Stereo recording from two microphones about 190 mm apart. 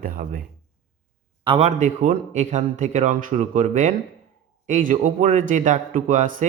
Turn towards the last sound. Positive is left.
turn(degrees=-45)  # may be behind; listen again after turning